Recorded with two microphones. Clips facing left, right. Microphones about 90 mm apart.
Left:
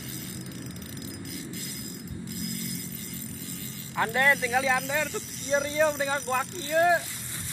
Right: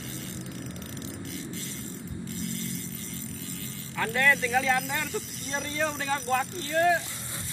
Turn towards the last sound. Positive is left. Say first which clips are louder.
# right 1 dB
turn(degrees=5)  # may be behind; listen again after turning